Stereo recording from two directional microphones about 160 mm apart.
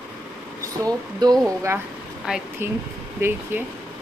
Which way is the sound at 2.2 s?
5° right (ahead or behind).